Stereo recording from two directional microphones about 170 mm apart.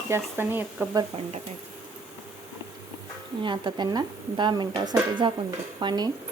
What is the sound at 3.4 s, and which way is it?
Speech, 25° right (ahead or behind).